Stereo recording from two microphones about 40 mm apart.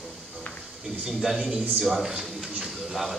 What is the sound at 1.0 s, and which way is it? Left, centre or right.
A man's voice, centre.